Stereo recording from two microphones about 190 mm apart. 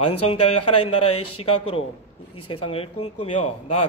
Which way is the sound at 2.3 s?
30° left (ahead or behind).